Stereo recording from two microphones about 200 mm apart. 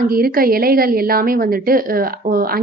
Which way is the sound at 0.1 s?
45° right (ahead or behind).